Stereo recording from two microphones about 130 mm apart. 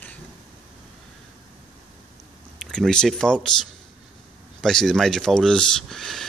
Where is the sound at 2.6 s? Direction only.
5° left (ahead or behind).